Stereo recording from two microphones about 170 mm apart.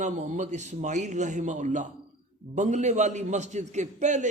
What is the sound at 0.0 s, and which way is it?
A man's voice, 45° right (ahead or behind).